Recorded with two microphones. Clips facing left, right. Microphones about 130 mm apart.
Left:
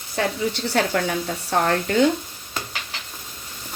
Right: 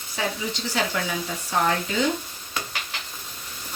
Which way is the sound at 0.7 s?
60° left (ahead or behind).